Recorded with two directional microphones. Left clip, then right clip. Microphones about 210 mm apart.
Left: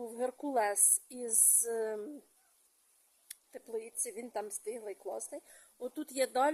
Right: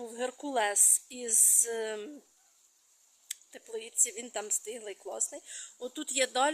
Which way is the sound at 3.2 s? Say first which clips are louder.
Right 3 dB; centre (ahead or behind).